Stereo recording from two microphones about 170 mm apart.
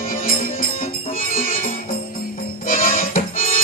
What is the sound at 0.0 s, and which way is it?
Music, 50° left (ahead or behind).